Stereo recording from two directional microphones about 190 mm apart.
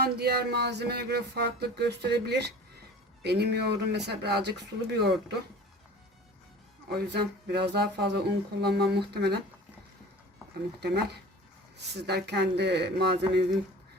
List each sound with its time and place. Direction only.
0.0 s music: 55° right (ahead or behind)
6.9 s music: 60° right (ahead or behind)
10.8 s music: 60° right (ahead or behind)